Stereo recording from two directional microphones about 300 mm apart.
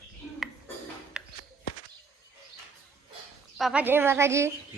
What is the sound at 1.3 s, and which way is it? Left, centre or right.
Walk, left.